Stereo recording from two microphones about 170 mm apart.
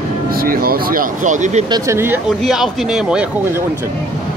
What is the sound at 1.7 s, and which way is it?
Speech, 15° right (ahead or behind).